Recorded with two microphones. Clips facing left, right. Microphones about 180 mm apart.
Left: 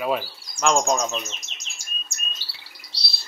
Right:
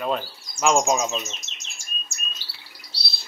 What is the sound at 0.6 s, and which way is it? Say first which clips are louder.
Bird: right 1 dB; 5° right (ahead or behind).